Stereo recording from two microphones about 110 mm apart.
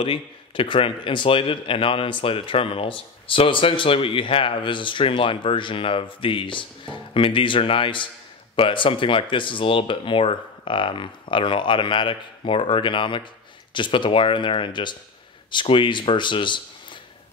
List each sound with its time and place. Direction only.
0.0 s a man's voice: 55° left (ahead or behind)